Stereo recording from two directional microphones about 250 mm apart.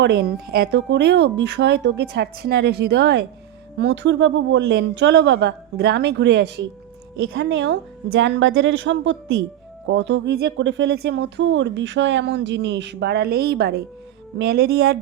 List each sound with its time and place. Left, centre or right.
0.0 s speech: right